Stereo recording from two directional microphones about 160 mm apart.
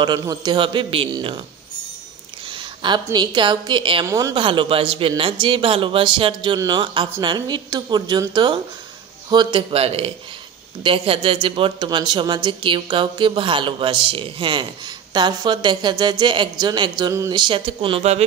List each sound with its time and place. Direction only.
0.0 s a woman's voice: 25° right (ahead or behind)
2.4 s a woman's voice: 30° right (ahead or behind)